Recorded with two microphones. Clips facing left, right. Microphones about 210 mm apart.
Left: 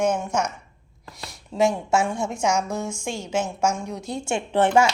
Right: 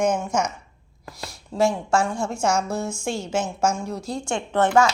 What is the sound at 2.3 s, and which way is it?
A woman's voice, 15° left (ahead or behind).